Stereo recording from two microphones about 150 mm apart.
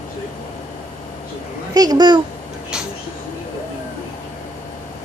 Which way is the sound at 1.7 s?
25° right (ahead or behind).